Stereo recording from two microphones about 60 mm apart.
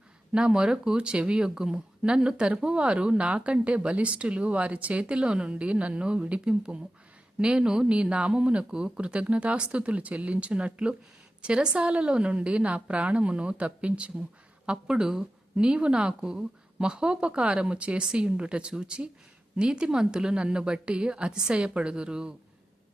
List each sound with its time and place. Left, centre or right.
0.3 s speech: centre